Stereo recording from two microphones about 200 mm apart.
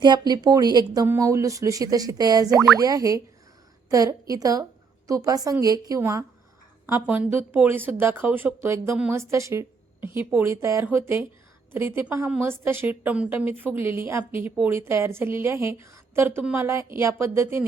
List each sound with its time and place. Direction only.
0.0 s a woman's voice: 20° right (ahead or behind)